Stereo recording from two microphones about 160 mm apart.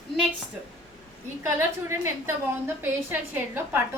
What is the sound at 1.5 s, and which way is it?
A woman's voice, 15° right (ahead or behind).